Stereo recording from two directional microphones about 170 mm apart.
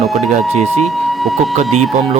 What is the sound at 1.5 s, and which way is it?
Speech, 40° right (ahead or behind).